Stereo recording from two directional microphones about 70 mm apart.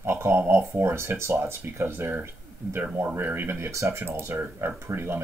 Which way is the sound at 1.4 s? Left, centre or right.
Right.